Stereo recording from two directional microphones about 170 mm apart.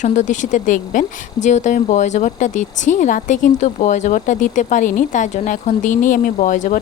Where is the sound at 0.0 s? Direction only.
45° left (ahead or behind).